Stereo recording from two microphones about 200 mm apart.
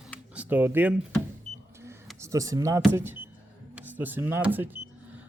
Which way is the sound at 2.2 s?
15° right (ahead or behind).